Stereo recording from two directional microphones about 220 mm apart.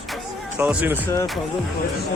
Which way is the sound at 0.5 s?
5° right (ahead or behind).